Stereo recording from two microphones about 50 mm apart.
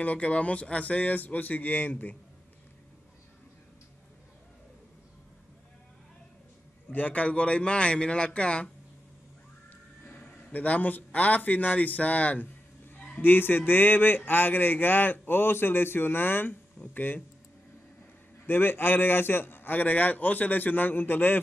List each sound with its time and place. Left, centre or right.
0.0 s speech: left
6.9 s a man's voice: left
10.2 s a man's voice: left
18.5 s speech: left